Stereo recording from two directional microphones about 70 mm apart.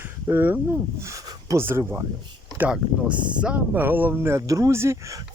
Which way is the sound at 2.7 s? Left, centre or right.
Centre.